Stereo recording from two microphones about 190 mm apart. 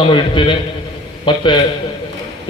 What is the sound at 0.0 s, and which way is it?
A man's voice, 25° left (ahead or behind).